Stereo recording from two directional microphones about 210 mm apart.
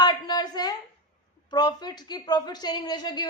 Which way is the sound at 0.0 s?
20° left (ahead or behind).